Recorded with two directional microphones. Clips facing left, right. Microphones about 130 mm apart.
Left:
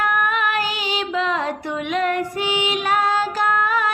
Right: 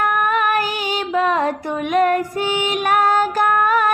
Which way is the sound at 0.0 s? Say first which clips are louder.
Right 3 dB; 45° right (ahead or behind).